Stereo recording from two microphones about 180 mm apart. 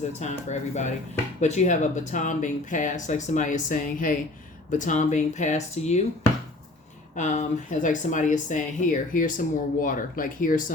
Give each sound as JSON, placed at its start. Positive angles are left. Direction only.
{"t": 0.2, "sound": "speech", "side_deg": 40}
{"t": 7.2, "sound": "speech", "side_deg": 40}